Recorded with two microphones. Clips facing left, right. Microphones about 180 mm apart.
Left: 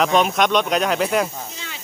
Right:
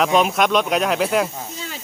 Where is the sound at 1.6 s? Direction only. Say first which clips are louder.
Right 4 dB; 40° right (ahead or behind).